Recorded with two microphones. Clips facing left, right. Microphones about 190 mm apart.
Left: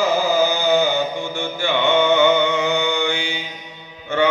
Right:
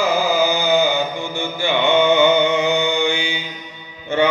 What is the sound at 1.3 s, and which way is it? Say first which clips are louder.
Music: right 2 dB; 10° right (ahead or behind).